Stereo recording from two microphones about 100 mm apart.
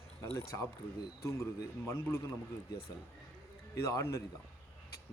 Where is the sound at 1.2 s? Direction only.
30° left (ahead or behind).